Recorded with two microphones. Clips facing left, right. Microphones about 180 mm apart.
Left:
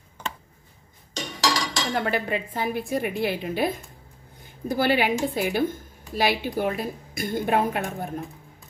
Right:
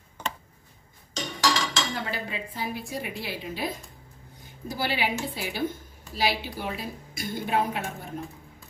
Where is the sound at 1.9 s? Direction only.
60° left (ahead or behind).